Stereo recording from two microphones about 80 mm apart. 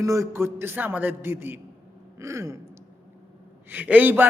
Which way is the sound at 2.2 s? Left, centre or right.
Right.